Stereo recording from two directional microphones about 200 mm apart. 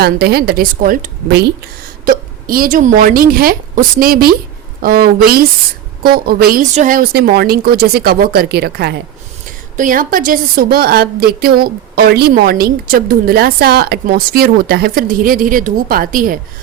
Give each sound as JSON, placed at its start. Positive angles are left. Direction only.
{"t": 0.0, "sound": "a woman's voice", "side_deg": -50}
{"t": 9.7, "sound": "a woman's voice", "side_deg": -40}